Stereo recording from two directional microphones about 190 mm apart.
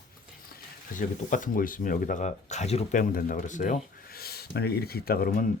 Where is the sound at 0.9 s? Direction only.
45° left (ahead or behind).